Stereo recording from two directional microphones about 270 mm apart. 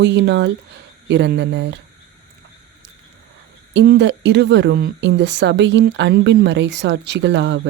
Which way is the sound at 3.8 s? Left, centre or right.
Right.